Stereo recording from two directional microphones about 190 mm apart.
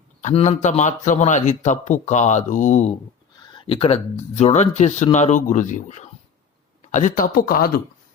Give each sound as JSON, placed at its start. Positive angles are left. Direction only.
{"t": 0.2, "sound": "speech", "side_deg": 35}
{"t": 3.5, "sound": "speech", "side_deg": 25}